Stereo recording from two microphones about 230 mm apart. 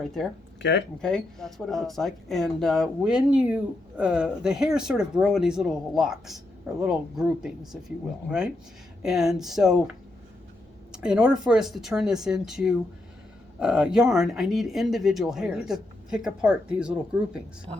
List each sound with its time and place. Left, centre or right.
0.0 s speech: centre
0.6 s speech: left
1.0 s speech: centre
10.9 s speech: centre